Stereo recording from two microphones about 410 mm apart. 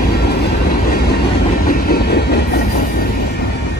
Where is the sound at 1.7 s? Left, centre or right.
Left.